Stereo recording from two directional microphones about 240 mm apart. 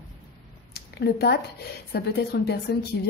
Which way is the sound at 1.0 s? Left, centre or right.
Left.